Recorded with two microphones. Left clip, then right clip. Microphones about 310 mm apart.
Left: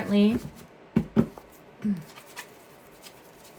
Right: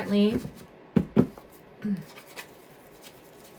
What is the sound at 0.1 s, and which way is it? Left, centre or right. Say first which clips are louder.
Speech: left 1 dB; centre.